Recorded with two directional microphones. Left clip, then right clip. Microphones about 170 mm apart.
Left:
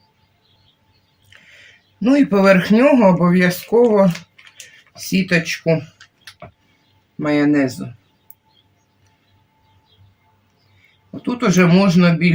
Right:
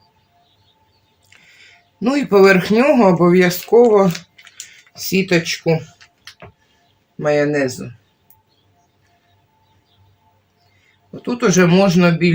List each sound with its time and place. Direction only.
2.0 s speech: 45° right (ahead or behind)
7.2 s speech: 25° right (ahead or behind)
11.2 s speech: 25° right (ahead or behind)